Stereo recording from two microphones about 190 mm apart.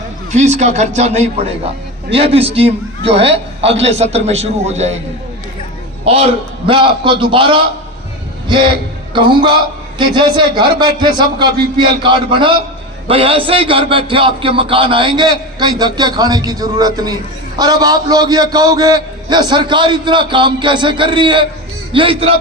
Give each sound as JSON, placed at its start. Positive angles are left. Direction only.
{"t": 0.3, "sound": "a man's voice", "side_deg": -35}
{"t": 6.1, "sound": "a man's voice", "side_deg": -30}